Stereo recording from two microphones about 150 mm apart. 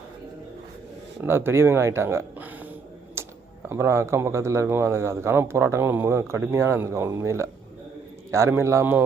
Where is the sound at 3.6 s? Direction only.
15° right (ahead or behind).